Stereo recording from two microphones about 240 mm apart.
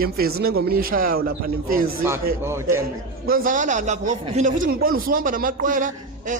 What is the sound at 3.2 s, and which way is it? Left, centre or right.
A man's voice, right.